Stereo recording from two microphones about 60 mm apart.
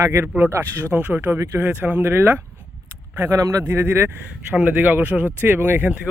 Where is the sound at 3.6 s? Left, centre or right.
Right.